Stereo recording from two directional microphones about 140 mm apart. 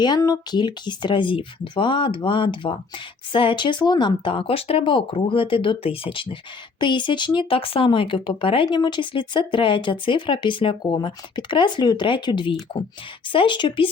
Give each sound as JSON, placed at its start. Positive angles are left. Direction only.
{"t": 0.0, "sound": "speech", "side_deg": 25}